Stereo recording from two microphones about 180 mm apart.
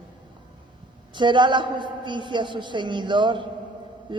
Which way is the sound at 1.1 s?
25° right (ahead or behind).